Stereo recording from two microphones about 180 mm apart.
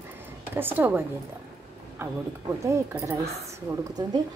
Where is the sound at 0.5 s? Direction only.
10° right (ahead or behind).